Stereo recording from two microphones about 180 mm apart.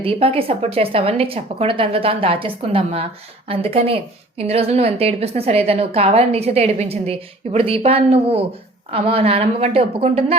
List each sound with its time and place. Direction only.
0.0 s a woman's voice: 30° right (ahead or behind)